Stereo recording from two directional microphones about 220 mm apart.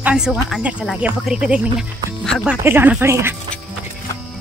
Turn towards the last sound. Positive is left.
turn(degrees=-10)  # may be behind; listen again after turning